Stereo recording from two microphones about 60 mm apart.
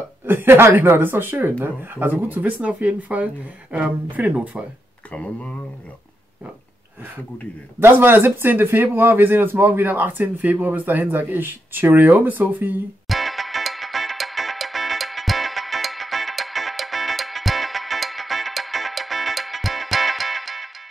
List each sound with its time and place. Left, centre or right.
0.2 s speech: right
5.1 s speech: left
7.8 s speech: right
13.1 s music: centre